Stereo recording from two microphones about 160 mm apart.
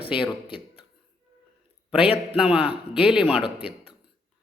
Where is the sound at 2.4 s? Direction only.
5° right (ahead or behind).